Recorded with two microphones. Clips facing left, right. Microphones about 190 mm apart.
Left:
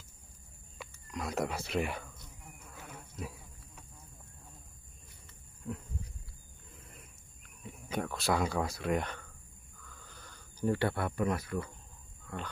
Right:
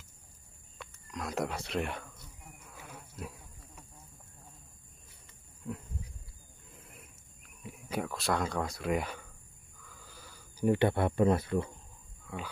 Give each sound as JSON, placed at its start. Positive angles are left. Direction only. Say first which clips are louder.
{"t": 0.7, "sound": "speech", "louder": "left 1 dB", "side_deg": 0}
{"t": 2.7, "sound": "wild animals", "louder": "even", "side_deg": 0}
{"t": 6.8, "sound": "a sound", "louder": "right 1 dB", "side_deg": 0}
{"t": 10.7, "sound": "speech", "louder": "right 5 dB", "side_deg": -20}